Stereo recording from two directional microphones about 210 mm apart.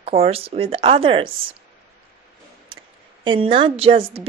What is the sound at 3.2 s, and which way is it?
A woman's voice, 25° right (ahead or behind).